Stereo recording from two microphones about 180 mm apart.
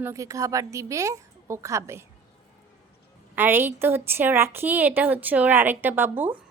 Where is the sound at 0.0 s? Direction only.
15° right (ahead or behind).